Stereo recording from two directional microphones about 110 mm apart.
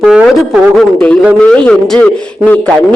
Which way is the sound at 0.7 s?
5° left (ahead or behind).